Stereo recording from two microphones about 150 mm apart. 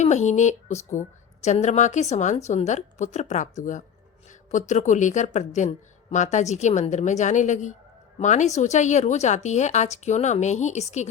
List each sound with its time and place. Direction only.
0.0 s speech: 50° left (ahead or behind)